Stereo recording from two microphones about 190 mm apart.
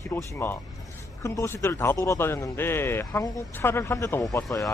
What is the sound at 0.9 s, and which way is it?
A man's voice, 15° left (ahead or behind).